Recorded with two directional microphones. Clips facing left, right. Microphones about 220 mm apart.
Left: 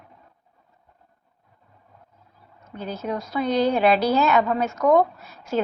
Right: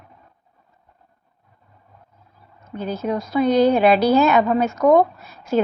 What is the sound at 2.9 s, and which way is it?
A woman's voice, 15° right (ahead or behind).